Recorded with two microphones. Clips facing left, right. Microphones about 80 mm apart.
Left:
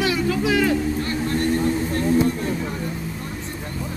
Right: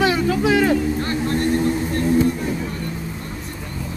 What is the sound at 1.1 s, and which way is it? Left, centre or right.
Vehicle, centre.